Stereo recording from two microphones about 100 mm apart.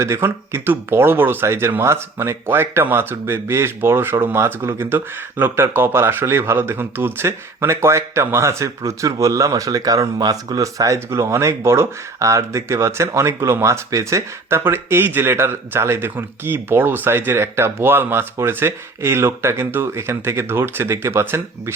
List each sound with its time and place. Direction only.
0.0 s speech: 25° right (ahead or behind)